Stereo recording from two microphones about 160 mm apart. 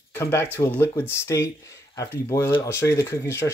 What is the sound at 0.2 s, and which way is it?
Speech, 15° left (ahead or behind).